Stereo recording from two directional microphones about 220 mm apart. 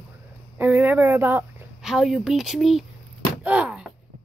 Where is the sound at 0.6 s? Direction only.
10° right (ahead or behind).